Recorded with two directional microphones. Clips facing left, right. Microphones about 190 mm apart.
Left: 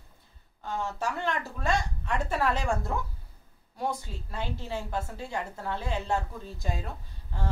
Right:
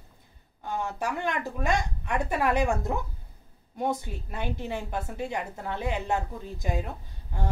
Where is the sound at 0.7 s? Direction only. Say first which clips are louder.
Right 1 dB; 15° right (ahead or behind).